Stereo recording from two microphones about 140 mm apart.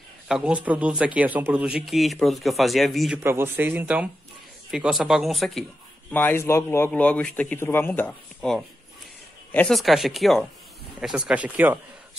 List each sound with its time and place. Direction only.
0.3 s speech: 10° right (ahead or behind)
3.2 s speech: 15° right (ahead or behind); by 5.7 s centre (ahead or behind)
6.1 s speech: 15° left (ahead or behind)
8.1 s speech: centre (ahead or behind)
9.8 s speech: centre (ahead or behind)